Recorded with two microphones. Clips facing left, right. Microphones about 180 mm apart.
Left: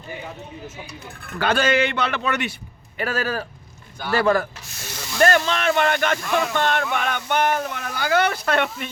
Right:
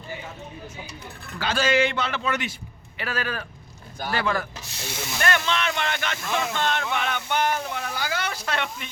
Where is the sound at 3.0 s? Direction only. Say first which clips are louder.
Left 5 dB; 45° left (ahead or behind).